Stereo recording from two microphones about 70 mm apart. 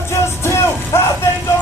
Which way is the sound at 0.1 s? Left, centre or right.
Left.